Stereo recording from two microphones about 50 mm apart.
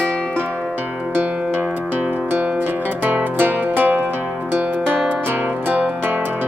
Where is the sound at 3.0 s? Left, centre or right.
Right.